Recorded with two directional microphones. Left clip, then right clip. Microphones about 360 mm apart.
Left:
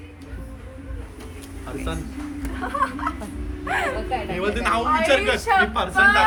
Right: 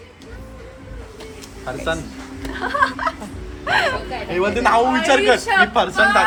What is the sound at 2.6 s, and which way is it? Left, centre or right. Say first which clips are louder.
A man's voice: right 6 dB; right.